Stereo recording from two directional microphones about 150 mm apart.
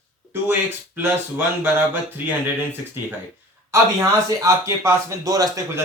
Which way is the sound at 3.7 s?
20° right (ahead or behind).